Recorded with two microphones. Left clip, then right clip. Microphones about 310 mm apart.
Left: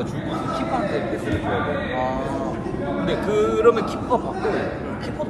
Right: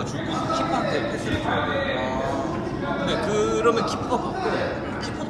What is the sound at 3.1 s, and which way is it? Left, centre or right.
Speech, left.